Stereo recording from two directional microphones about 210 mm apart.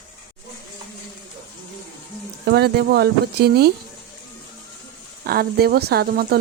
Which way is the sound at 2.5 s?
50° right (ahead or behind).